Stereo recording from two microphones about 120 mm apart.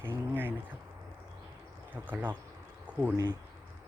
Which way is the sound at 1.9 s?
15° right (ahead or behind).